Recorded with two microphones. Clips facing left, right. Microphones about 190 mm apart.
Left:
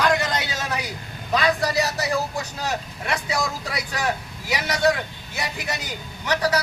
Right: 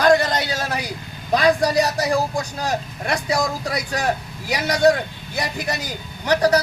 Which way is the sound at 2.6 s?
35° right (ahead or behind).